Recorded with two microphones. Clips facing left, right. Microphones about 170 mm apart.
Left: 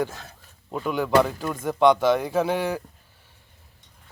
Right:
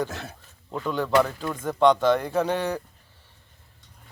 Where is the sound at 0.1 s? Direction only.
70° right (ahead or behind).